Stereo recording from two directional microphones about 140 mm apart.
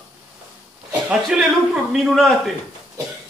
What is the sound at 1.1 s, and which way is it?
A man's voice, 5° right (ahead or behind).